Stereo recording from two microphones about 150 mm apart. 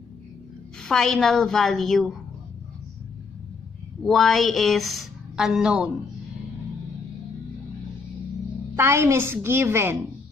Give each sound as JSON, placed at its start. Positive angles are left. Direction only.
{"t": 0.8, "sound": "a woman's voice", "side_deg": 5}
{"t": 4.0, "sound": "a woman's voice", "side_deg": 0}
{"t": 8.7, "sound": "a woman's voice", "side_deg": -15}